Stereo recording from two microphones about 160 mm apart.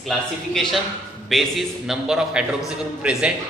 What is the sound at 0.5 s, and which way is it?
A man's voice, centre (ahead or behind).